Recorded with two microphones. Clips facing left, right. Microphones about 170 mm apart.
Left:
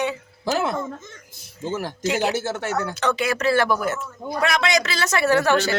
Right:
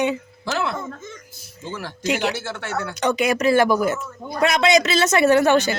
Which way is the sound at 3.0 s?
15° right (ahead or behind).